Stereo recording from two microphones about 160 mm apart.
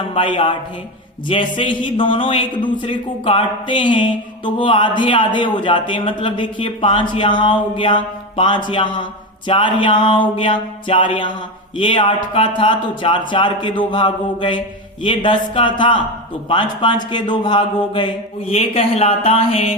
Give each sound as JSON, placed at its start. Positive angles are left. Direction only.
{"t": 0.1, "sound": "a man's voice", "side_deg": 35}